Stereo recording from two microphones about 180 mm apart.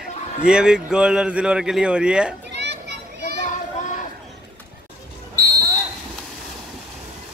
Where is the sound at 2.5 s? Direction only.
75° right (ahead or behind).